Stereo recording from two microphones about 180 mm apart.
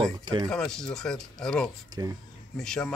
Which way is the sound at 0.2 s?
25° right (ahead or behind).